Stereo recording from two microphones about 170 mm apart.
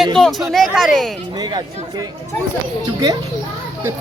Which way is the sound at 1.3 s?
25° right (ahead or behind).